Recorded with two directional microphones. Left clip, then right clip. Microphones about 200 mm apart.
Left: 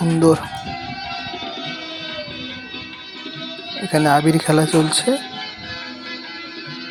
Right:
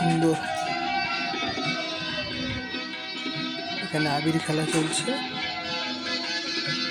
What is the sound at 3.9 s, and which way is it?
Speech, 25° left (ahead or behind).